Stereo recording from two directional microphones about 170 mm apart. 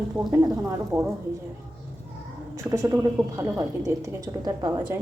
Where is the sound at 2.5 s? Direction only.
20° right (ahead or behind).